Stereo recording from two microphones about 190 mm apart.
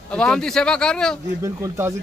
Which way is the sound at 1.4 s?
15° right (ahead or behind).